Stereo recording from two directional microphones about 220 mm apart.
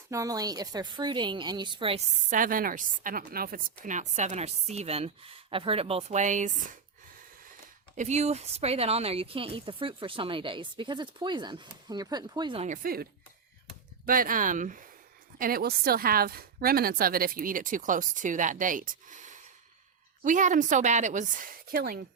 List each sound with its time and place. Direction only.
0.1 s speech: 15° right (ahead or behind)
2.3 s a woman's voice: 40° right (ahead or behind)
7.9 s speech: 30° right (ahead or behind)
12.6 s a woman's voice: 35° right (ahead or behind)